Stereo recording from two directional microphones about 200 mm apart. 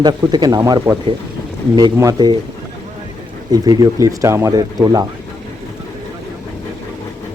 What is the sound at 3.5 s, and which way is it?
Speech, 20° right (ahead or behind).